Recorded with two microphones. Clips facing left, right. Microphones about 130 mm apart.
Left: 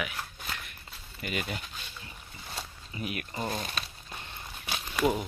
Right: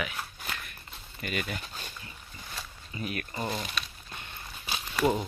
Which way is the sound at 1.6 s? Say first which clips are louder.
Right 2 dB; 40° right (ahead or behind).